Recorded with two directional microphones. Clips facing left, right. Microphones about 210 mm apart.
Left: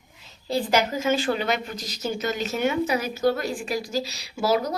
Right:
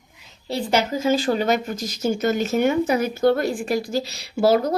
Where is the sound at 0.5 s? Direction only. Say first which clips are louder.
Right 1 dB; 25° right (ahead or behind).